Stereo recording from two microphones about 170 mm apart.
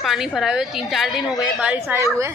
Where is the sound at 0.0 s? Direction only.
Centre (ahead or behind).